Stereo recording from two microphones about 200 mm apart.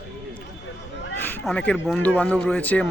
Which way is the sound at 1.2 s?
5° left (ahead or behind).